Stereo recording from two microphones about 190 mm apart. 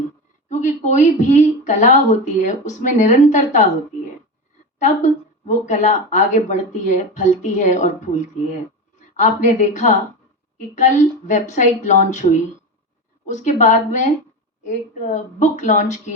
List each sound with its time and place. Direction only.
0.4 s a woman's voice: 40° left (ahead or behind)
4.8 s a woman's voice: 40° left (ahead or behind)
9.1 s a woman's voice: 40° left (ahead or behind)
15.1 s a woman's voice: 40° left (ahead or behind)